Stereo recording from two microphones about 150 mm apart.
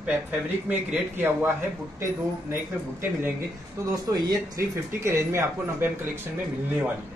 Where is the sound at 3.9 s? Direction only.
25° right (ahead or behind).